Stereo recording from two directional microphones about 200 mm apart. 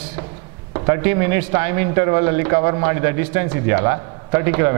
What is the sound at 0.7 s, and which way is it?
A man's voice, 15° right (ahead or behind).